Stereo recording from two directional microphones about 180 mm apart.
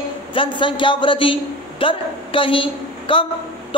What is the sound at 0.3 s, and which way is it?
A man's voice, 30° left (ahead or behind).